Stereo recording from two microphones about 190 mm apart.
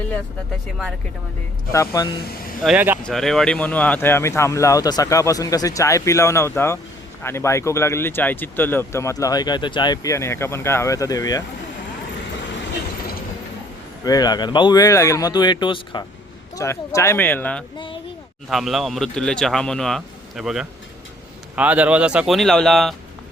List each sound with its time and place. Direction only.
1.7 s speech: 15° left (ahead or behind)
2.6 s speech: 10° right (ahead or behind)
3.0 s speech: centre (ahead or behind); by 11.4 s 20° left (ahead or behind)
14.0 s speech: 20° left (ahead or behind)
17.7 s speech: 25° left (ahead or behind)
18.4 s speech: centre (ahead or behind)